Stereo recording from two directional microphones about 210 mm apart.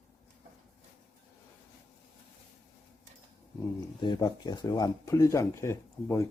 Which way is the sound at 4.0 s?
20° left (ahead or behind).